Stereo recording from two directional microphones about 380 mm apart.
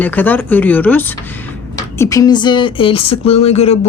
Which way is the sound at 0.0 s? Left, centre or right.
Centre.